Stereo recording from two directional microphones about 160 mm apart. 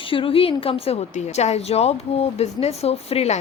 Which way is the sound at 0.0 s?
35° left (ahead or behind).